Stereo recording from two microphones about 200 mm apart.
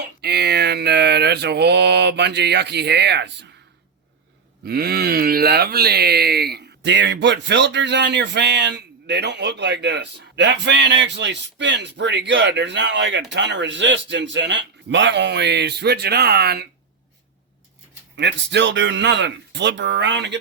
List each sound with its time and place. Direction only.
0.0 s speech: 55° right (ahead or behind)
4.6 s speech: 50° right (ahead or behind)
18.2 s speech: 60° right (ahead or behind)